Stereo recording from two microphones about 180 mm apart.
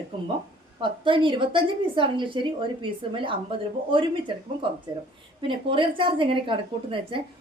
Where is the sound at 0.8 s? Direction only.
25° right (ahead or behind).